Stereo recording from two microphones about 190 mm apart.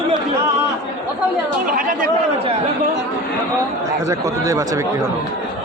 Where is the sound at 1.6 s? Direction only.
50° right (ahead or behind).